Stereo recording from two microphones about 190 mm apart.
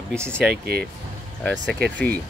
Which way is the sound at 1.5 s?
70° right (ahead or behind).